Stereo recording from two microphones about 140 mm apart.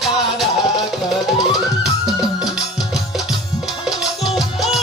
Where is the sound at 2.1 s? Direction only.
5° right (ahead or behind).